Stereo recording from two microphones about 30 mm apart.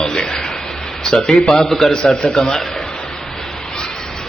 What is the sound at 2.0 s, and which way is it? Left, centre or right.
Speech, left.